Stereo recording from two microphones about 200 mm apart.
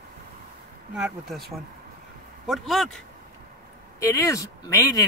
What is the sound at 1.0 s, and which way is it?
A man's voice, centre (ahead or behind).